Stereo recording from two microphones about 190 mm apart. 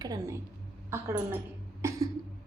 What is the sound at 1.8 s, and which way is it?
Cough, 15° right (ahead or behind).